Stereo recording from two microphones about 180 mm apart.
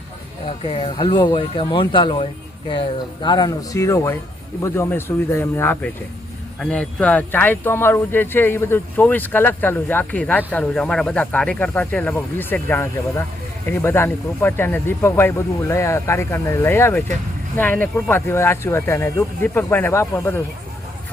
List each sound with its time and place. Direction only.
0.4 s speech: 30° left (ahead or behind)
3.2 s speech: 20° left (ahead or behind)